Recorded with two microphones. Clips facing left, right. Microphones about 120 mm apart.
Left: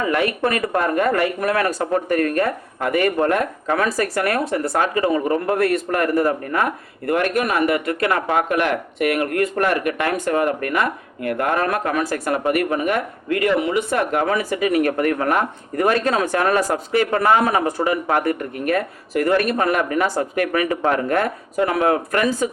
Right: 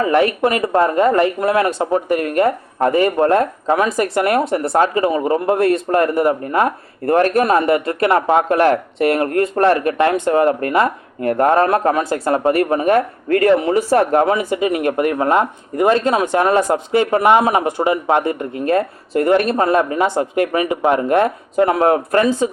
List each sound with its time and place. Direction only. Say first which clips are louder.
0.0 s speech: right 5 dB; 30° right (ahead or behind)